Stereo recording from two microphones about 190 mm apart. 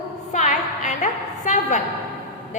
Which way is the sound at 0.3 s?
40° left (ahead or behind).